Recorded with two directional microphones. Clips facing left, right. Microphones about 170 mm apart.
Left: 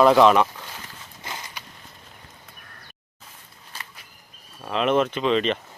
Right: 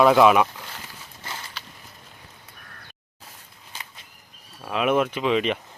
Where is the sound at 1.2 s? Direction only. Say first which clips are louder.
Left 1 dB; 15° left (ahead or behind).